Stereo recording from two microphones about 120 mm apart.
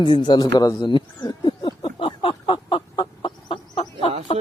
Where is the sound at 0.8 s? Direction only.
40° left (ahead or behind).